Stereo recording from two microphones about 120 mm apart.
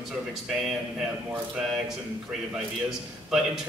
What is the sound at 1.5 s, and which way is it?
A man's voice, 5° right (ahead or behind).